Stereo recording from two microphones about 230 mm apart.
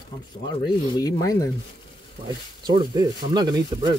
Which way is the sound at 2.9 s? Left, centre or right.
Centre.